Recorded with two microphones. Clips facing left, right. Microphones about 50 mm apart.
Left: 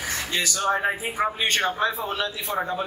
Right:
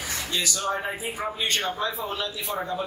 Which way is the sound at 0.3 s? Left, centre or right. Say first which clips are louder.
Left 3 dB; left.